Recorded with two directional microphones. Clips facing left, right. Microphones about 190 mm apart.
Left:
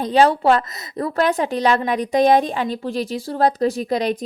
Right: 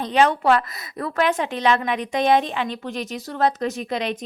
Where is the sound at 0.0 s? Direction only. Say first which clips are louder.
Left 3 dB; 35° left (ahead or behind).